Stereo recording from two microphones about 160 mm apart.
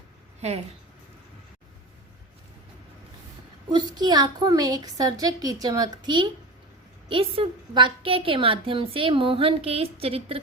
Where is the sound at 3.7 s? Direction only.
25° right (ahead or behind).